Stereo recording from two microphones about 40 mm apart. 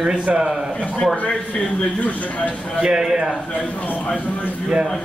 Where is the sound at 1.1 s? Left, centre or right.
Left.